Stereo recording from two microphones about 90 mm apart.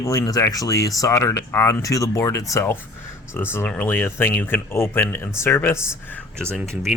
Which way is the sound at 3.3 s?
25° left (ahead or behind).